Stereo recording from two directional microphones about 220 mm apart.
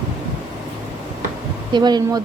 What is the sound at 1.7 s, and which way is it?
Speech, 20° right (ahead or behind).